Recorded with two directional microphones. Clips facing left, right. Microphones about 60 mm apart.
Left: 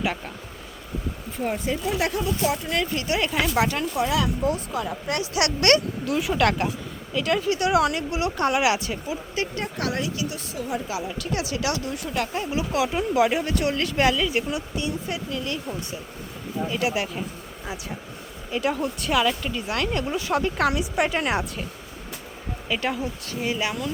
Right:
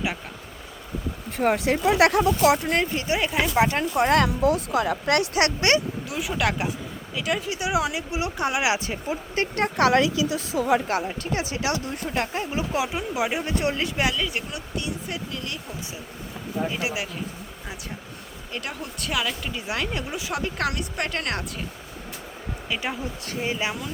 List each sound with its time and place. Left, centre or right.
1.4 s speech: right
2.9 s speech: right
3.6 s speech: right
3.9 s speech: right
5.3 s speech: right
5.6 s speech: centre
6.1 s speech: centre
9.0 s speech: right
9.6 s speech: right
10.7 s speech: right
11.0 s speech: right
13.9 s speech: centre
18.5 s speech: centre
22.7 s speech: centre